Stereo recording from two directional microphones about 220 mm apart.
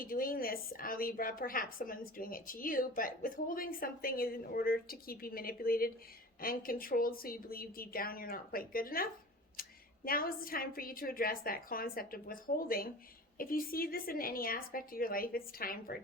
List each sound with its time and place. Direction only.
0.0 s a woman's voice: 40° left (ahead or behind)